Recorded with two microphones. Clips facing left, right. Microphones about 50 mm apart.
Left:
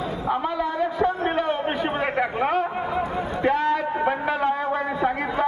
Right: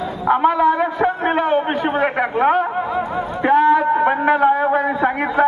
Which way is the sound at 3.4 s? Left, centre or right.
Right.